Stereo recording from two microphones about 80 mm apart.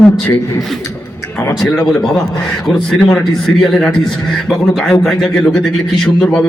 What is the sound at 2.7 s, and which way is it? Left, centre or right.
A man's voice, centre.